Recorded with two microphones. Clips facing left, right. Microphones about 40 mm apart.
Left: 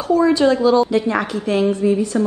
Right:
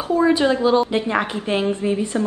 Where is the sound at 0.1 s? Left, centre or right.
Right.